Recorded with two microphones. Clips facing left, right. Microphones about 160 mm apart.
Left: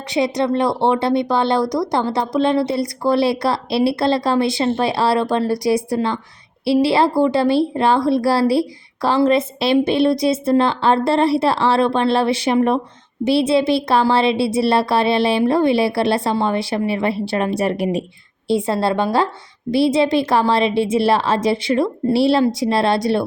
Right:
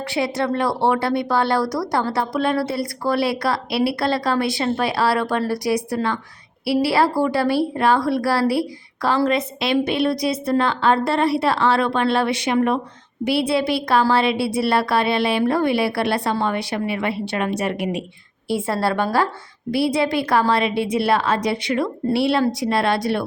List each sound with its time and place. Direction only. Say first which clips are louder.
0.1 s a woman's voice: left 5 dB; 20° left (ahead or behind)
18.4 s a woman's voice: left 3 dB; 20° left (ahead or behind)